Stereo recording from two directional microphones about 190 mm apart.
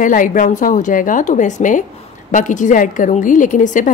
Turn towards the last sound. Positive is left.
turn(degrees=40)  # may be behind; listen again after turning